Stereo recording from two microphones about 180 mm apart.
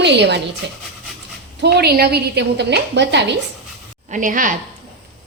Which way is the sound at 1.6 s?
65° right (ahead or behind).